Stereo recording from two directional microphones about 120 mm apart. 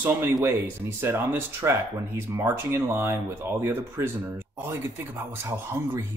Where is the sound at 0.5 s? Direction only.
20° right (ahead or behind).